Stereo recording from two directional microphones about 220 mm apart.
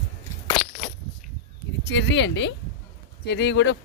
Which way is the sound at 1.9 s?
50° left (ahead or behind).